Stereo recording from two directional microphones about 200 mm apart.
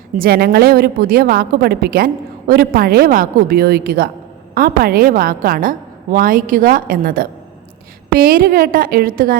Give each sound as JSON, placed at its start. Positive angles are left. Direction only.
{"t": 0.2, "sound": "a woman's voice", "side_deg": -50}